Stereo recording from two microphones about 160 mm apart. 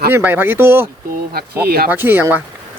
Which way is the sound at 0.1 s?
10° right (ahead or behind).